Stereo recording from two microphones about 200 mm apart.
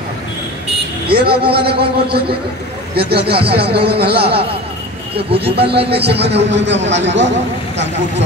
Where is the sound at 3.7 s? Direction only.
55° right (ahead or behind).